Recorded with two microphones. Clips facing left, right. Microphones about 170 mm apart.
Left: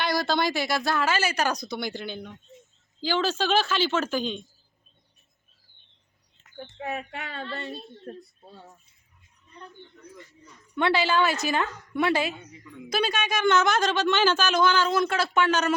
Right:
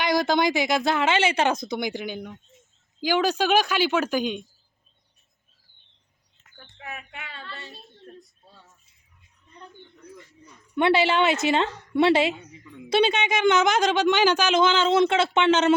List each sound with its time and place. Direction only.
0.0 s a woman's voice: 20° right (ahead or behind)
6.6 s speech: 30° left (ahead or behind)
8.1 s a woman's voice: 65° left (ahead or behind)
8.4 s speech: 50° left (ahead or behind)
10.8 s a woman's voice: 20° right (ahead or behind)